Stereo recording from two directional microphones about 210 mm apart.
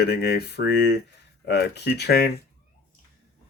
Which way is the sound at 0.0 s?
50° left (ahead or behind).